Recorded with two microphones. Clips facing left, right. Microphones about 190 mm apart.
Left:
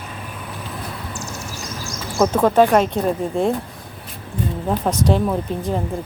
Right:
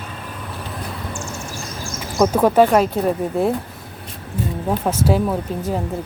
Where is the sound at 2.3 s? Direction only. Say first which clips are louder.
Even; 10° right (ahead or behind).